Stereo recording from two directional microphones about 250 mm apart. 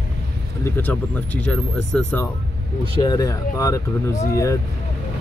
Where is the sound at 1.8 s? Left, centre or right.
Right.